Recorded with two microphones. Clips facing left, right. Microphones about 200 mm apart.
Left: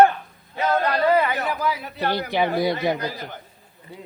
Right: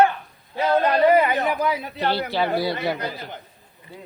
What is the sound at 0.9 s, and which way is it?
A man's voice, 15° right (ahead or behind).